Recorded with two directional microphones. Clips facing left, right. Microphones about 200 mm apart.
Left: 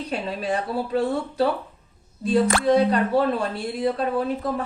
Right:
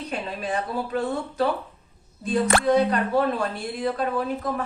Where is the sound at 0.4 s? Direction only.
30° left (ahead or behind).